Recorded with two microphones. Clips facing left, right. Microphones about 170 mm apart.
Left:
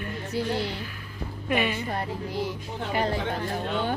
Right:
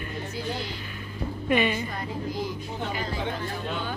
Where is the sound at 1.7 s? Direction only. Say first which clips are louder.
Left 1 dB; 70° left (ahead or behind).